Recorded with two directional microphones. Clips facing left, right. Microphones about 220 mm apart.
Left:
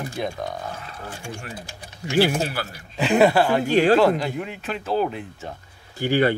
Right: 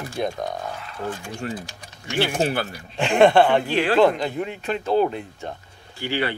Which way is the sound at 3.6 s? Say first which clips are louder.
Left 4 dB; 45° left (ahead or behind).